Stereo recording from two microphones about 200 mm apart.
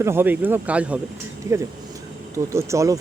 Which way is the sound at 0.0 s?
10° right (ahead or behind).